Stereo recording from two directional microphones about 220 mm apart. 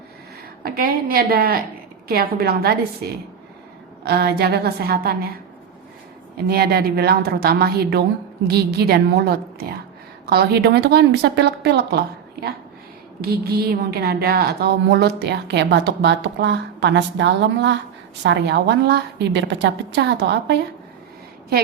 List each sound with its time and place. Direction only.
0.6 s a woman's voice: 40° right (ahead or behind)